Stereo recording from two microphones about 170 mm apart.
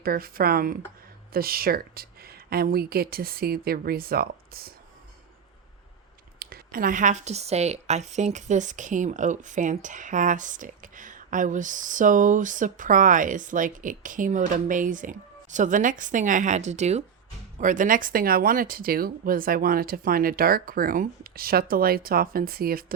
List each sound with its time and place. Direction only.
0.0 s speech: 60° right (ahead or behind)
6.4 s a woman's voice: 60° right (ahead or behind)